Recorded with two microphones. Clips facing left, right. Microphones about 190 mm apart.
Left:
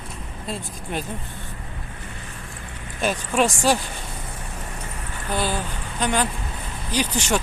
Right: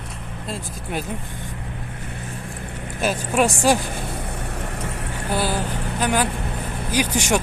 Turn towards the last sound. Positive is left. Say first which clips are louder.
# right 2 dB
turn(degrees=-10)  # may be behind; listen again after turning